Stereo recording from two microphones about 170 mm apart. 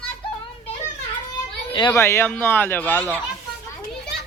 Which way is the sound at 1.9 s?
15° left (ahead or behind).